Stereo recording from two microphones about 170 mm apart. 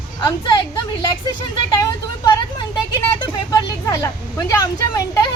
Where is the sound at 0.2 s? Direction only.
25° left (ahead or behind).